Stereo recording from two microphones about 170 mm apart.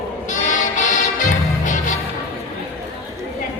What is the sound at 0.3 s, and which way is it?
Music, 45° left (ahead or behind).